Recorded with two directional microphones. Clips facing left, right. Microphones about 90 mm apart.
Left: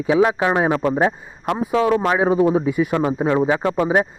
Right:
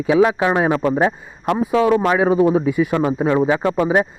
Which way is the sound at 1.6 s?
30° left (ahead or behind).